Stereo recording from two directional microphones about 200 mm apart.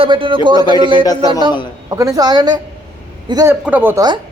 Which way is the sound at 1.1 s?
20° left (ahead or behind).